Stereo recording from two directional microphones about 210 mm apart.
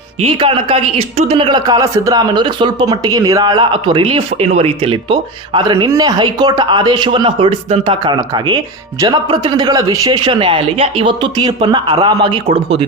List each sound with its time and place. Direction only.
0.2 s speech: 25° right (ahead or behind)